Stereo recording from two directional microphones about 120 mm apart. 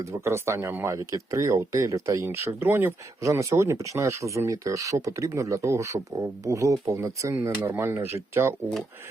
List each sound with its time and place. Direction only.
0.0 s speech: 20° right (ahead or behind)